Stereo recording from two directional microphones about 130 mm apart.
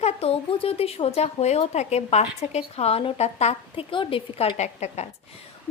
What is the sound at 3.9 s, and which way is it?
Speech, 40° left (ahead or behind).